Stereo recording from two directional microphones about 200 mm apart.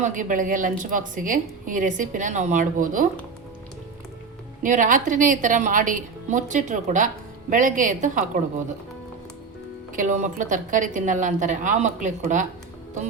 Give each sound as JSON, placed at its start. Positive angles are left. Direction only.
{"t": 0.0, "sound": "a woman's voice", "side_deg": -40}
{"t": 4.6, "sound": "a woman's voice", "side_deg": -40}
{"t": 9.9, "sound": "a woman's voice", "side_deg": -40}